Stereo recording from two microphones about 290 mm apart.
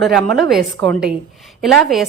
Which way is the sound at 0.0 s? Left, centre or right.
Centre.